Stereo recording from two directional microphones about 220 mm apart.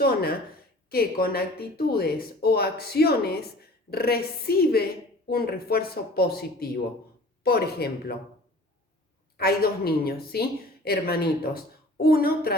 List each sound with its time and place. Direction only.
0.0 s speech: 45° left (ahead or behind)
9.4 s speech: 45° left (ahead or behind)